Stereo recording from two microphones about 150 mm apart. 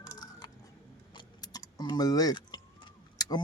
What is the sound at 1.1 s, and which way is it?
Keys jangling, 30° left (ahead or behind).